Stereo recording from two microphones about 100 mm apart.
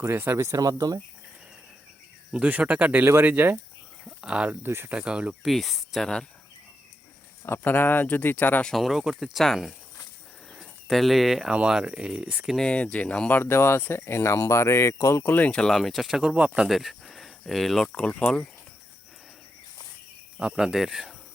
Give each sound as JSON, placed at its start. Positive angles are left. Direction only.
{"t": 0.0, "sound": "speech", "side_deg": -25}
{"t": 2.3, "sound": "speech", "side_deg": -10}
{"t": 4.0, "sound": "a sound", "side_deg": -10}
{"t": 4.6, "sound": "speech", "side_deg": -25}
{"t": 4.9, "sound": "speech", "side_deg": -10}
{"t": 7.4, "sound": "speech", "side_deg": 20}
{"t": 8.6, "sound": "speech", "side_deg": 0}
{"t": 12.5, "sound": "speech", "side_deg": 10}
{"t": 16.6, "sound": "speech", "side_deg": 0}
{"t": 20.4, "sound": "speech", "side_deg": -5}